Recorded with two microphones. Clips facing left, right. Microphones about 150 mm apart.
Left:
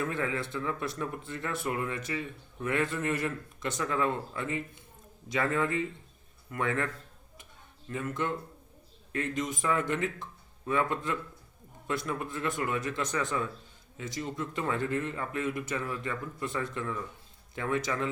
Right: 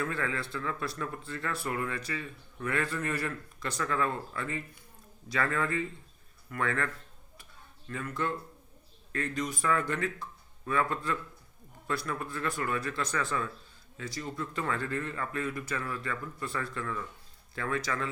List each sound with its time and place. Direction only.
0.0 s speech: 20° left (ahead or behind)